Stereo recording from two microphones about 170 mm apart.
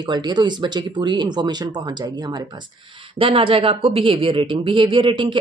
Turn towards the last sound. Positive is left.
turn(degrees=-30)  # may be behind; listen again after turning